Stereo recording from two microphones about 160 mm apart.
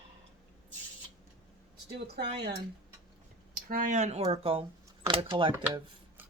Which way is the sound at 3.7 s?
55° right (ahead or behind).